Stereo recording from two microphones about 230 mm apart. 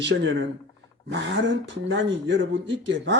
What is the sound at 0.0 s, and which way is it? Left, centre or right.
A man's voice, right.